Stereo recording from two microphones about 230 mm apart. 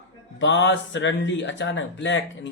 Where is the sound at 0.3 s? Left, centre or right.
Left.